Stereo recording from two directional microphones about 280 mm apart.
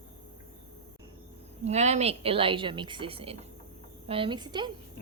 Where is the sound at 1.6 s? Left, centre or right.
Right.